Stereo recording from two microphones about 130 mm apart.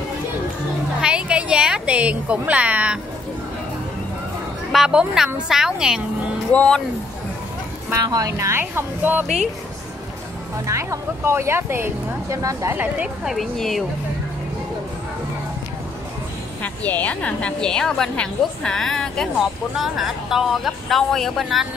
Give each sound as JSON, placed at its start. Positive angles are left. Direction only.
{"t": 1.0, "sound": "a woman's voice", "side_deg": -10}
{"t": 4.7, "sound": "speech", "side_deg": -5}
{"t": 6.5, "sound": "a woman's voice", "side_deg": 10}
{"t": 7.9, "sound": "speech", "side_deg": -30}
{"t": 10.7, "sound": "speech", "side_deg": -20}
{"t": 12.7, "sound": "speech", "side_deg": -10}
{"t": 16.6, "sound": "a woman's voice", "side_deg": 10}